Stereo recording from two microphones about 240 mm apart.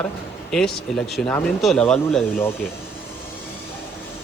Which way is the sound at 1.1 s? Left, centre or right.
Centre.